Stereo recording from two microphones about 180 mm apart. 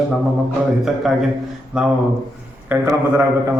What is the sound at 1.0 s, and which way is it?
Speech, centre (ahead or behind).